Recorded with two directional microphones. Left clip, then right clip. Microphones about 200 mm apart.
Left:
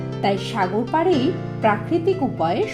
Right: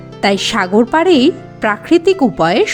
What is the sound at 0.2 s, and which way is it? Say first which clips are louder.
Speech: right 8 dB; 40° right (ahead or behind).